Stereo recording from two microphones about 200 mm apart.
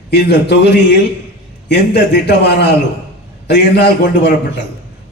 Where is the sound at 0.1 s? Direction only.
55° left (ahead or behind).